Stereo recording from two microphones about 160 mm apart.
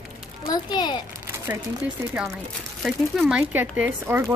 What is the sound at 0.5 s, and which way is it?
Speech, 25° left (ahead or behind).